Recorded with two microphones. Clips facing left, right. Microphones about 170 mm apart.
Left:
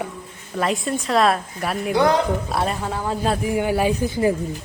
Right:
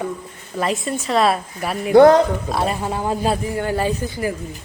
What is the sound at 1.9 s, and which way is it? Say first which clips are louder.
Speech: right 9 dB; 50° right (ahead or behind).